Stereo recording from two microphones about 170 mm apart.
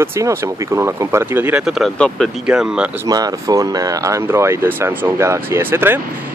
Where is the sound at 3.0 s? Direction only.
20° right (ahead or behind).